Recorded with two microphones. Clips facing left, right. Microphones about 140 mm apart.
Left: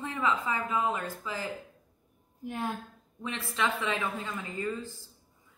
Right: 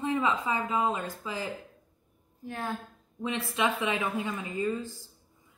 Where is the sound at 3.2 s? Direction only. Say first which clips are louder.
Right 3 dB; 15° right (ahead or behind).